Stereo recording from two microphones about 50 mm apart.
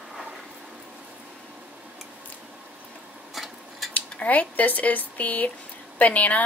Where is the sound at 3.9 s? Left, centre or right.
Left.